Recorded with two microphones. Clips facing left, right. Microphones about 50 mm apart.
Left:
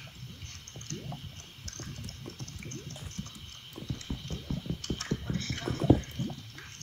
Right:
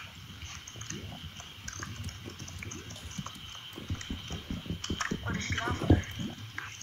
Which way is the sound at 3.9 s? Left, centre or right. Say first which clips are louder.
Left 2 dB; right.